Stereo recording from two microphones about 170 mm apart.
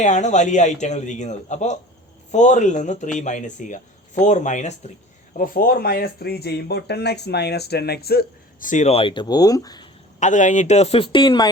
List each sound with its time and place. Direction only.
0.0 s speech: 45° left (ahead or behind)
5.4 s speech: 60° left (ahead or behind); by 9.9 s 25° left (ahead or behind)
10.2 s speech: 45° left (ahead or behind); by 11.5 s 25° left (ahead or behind)